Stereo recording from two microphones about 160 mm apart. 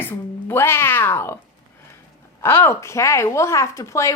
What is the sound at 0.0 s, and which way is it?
Cat, 15° left (ahead or behind).